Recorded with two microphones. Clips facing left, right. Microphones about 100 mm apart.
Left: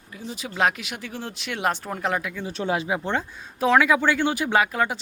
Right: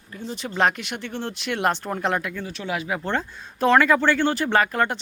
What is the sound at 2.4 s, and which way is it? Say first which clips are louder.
Speech: left 3 dB; 30° left (ahead or behind).